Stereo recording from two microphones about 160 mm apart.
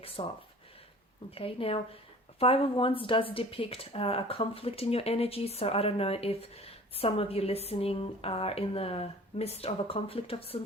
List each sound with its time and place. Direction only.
0.0 s speech: 35° left (ahead or behind)
1.4 s speech: 35° left (ahead or behind)